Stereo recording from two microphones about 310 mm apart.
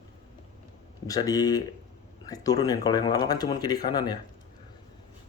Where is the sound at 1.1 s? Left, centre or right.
Centre.